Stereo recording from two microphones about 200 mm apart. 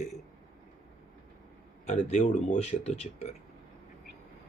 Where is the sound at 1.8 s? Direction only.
35° left (ahead or behind).